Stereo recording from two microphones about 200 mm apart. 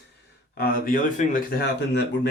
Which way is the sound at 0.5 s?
45° left (ahead or behind).